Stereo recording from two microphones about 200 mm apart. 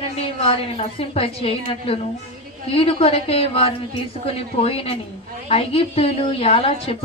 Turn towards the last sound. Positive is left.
turn(degrees=30)  # may be behind; listen again after turning